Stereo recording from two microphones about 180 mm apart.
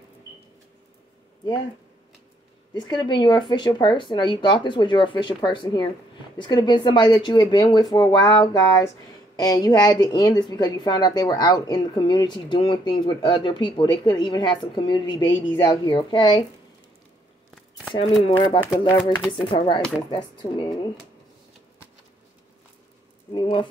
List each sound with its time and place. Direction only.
2.7 s a woman's voice: 25° left (ahead or behind)
17.9 s a woman's voice: 30° left (ahead or behind)
23.3 s a woman's voice: 25° left (ahead or behind)